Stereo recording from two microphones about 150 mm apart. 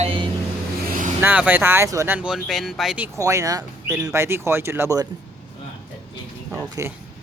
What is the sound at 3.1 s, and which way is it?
Speech, 20° right (ahead or behind).